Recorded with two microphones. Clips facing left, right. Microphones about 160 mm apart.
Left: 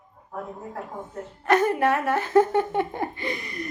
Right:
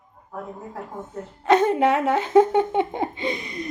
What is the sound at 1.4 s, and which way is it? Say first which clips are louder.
Speech: right 3 dB; 20° right (ahead or behind).